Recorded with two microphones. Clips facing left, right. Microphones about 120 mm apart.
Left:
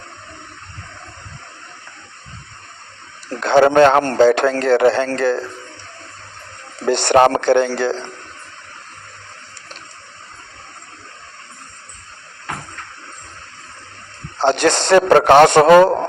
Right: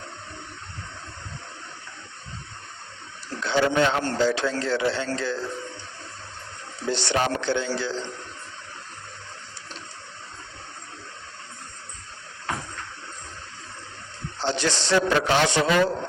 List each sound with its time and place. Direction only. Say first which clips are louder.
3.2 s a man's voice: left 10 dB; 55° left (ahead or behind)
6.7 s a man's voice: left 12 dB; 55° left (ahead or behind)
14.3 s a man's voice: left 11 dB; 55° left (ahead or behind)